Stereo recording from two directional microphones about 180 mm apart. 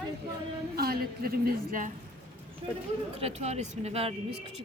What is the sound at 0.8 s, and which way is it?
A woman's voice, 60° right (ahead or behind).